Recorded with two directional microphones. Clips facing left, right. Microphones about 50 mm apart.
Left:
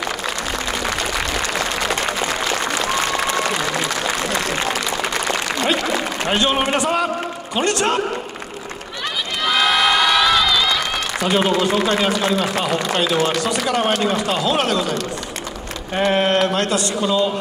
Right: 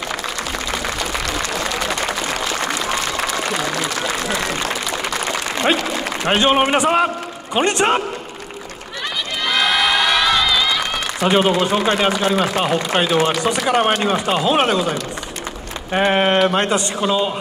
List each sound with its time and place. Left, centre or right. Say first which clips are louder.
6.2 s speech: right 5 dB; right
9.4 s crowd: left 1 dB; centre
11.2 s speech: right 2 dB; right
15.9 s speech: right 1 dB; right